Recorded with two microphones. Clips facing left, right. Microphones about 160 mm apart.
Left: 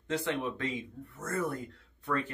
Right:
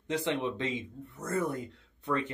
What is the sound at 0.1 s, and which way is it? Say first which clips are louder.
Speech: right 1 dB; 20° right (ahead or behind).